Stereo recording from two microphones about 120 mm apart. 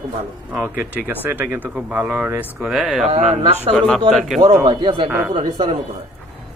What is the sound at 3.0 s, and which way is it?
Speech, 70° right (ahead or behind).